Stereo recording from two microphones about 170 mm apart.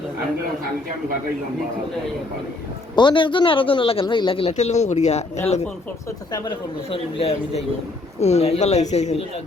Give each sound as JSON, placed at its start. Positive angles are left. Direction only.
{"t": 2.9, "sound": "a man's voice", "side_deg": 25}
{"t": 6.3, "sound": "a man's voice", "side_deg": 25}